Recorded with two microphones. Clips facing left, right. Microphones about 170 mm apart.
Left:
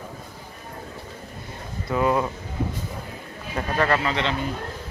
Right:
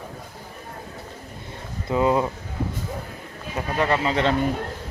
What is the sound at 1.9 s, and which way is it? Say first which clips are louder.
Speech: right 2 dB; 20° right (ahead or behind).